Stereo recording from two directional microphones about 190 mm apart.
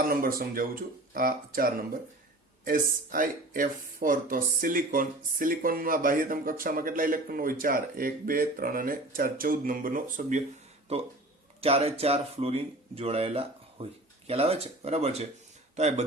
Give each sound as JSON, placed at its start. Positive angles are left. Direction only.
{"t": 0.0, "sound": "speech", "side_deg": -50}